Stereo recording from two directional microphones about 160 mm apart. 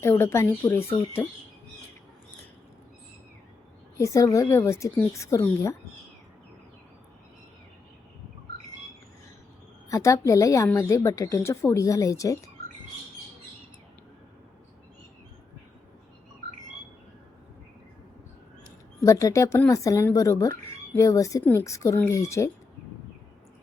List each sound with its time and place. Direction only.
0.0 s speech: 15° left (ahead or behind)
3.9 s speech: 20° left (ahead or behind)
9.9 s speech: 20° left (ahead or behind)
19.0 s speech: 20° left (ahead or behind)